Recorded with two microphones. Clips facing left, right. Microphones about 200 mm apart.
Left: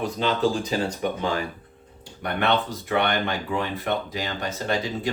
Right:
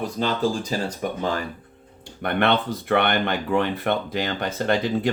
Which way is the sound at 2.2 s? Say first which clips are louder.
Right 2 dB; 55° right (ahead or behind).